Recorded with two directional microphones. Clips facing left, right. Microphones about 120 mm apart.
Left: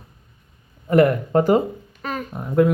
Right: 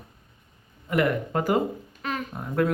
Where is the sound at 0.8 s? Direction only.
40° left (ahead or behind).